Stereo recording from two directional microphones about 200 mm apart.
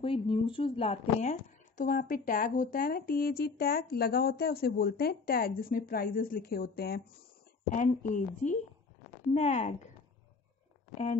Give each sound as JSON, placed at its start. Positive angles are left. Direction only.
{"t": 0.0, "sound": "speech", "side_deg": 25}
{"t": 7.7, "sound": "a woman's voice", "side_deg": 40}